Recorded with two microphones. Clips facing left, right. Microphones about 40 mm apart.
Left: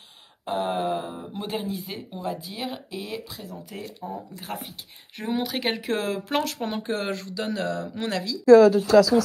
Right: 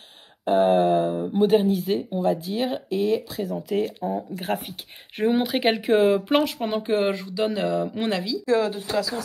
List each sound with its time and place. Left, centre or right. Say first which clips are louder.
0.5 s a sound: right 8 dB; right
1.5 s speech: right 11 dB; right
5.3 s speech: right 3 dB; right
8.5 s speech: left 10 dB; left